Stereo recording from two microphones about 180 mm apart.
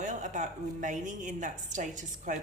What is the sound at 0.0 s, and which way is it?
A woman's voice, 40° right (ahead or behind).